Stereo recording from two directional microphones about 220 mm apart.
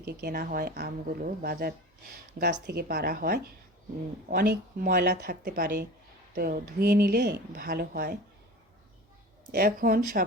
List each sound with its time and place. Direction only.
0.0 s speech: 45° right (ahead or behind)
9.6 s speech: 40° right (ahead or behind)